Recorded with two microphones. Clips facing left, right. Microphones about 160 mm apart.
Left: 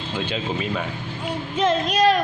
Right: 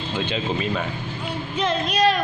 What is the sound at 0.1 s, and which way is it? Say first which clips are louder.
Speech: right 1 dB; 5° left (ahead or behind).